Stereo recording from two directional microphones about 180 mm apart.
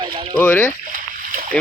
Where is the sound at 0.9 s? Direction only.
50° right (ahead or behind).